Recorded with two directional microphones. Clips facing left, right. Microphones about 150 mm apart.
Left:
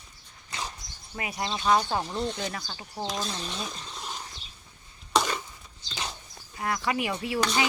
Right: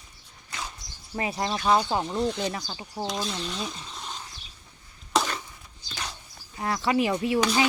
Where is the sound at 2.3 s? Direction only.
20° right (ahead or behind).